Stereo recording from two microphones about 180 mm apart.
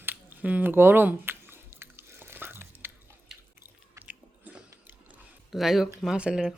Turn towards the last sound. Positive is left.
turn(degrees=-5)  # may be behind; listen again after turning